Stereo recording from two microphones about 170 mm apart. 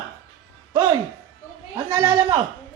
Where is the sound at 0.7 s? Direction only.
25° right (ahead or behind).